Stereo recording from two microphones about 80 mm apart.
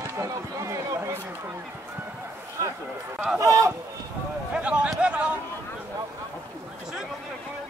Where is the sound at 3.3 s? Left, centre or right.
Right.